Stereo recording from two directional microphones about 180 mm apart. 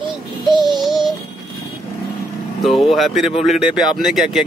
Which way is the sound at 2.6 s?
Centre (ahead or behind).